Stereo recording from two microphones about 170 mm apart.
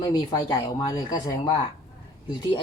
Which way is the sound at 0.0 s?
25° left (ahead or behind).